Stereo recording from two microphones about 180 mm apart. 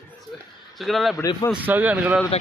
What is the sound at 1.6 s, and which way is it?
Speech, 10° right (ahead or behind).